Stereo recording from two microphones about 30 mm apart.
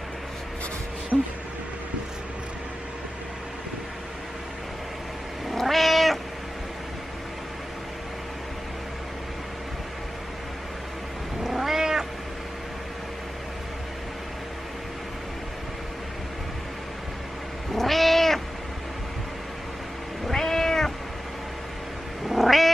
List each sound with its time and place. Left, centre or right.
1.1 s speech: right
5.5 s cat: centre
11.4 s cat: centre
17.7 s cat: centre
20.2 s cat: centre
22.3 s cat: centre